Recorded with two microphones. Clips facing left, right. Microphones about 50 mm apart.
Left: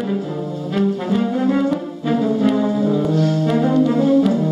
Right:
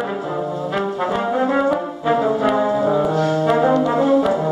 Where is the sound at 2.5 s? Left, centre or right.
Right.